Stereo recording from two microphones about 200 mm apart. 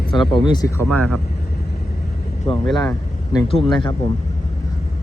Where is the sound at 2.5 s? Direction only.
30° left (ahead or behind).